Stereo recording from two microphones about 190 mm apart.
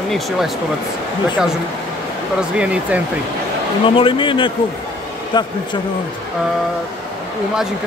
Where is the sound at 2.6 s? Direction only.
5° right (ahead or behind).